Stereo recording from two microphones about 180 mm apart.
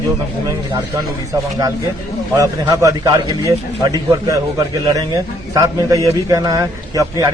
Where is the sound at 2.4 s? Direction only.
20° right (ahead or behind).